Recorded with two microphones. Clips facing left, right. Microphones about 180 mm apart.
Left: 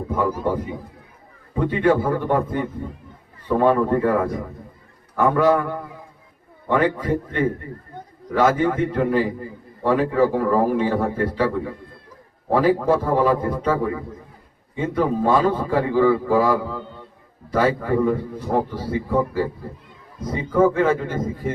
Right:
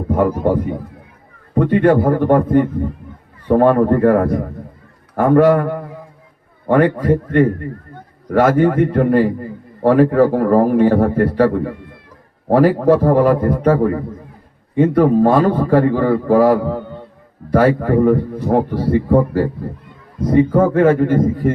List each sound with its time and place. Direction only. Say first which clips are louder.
0.1 s a man's voice: right 7 dB; 60° right (ahead or behind)
12.5 s a man's voice: right 6 dB; 55° right (ahead or behind)